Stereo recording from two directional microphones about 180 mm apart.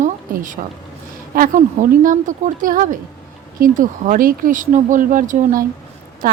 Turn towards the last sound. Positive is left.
turn(degrees=-45)  # may be behind; listen again after turning